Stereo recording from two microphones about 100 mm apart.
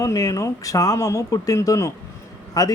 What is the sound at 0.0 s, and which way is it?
Speech, 35° left (ahead or behind).